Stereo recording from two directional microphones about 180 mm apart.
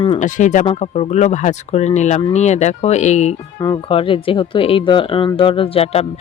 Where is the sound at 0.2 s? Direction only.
45° left (ahead or behind).